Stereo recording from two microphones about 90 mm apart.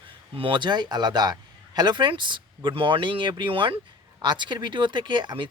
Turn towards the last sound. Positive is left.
turn(degrees=-60)  # may be behind; listen again after turning